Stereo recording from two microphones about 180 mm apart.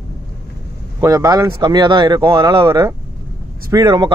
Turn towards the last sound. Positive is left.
turn(degrees=-20)  # may be behind; listen again after turning